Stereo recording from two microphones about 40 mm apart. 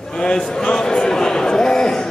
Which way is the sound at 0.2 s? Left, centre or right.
Left.